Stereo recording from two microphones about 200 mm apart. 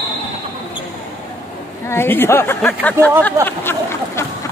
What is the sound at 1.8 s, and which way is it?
Speech, 10° left (ahead or behind).